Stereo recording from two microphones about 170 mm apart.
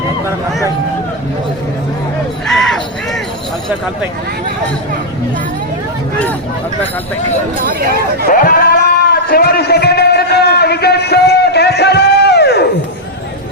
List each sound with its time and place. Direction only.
2.5 s a sound: 5° left (ahead or behind)
7.6 s speech: 60° right (ahead or behind)
8.3 s a man's voice: 55° left (ahead or behind); by 12.6 s 75° left (ahead or behind)